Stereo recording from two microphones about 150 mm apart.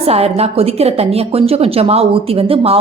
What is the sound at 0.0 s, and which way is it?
A woman's voice, 45° right (ahead or behind).